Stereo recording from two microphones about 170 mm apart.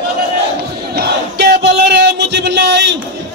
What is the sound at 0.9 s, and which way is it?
Crowd, 70° right (ahead or behind).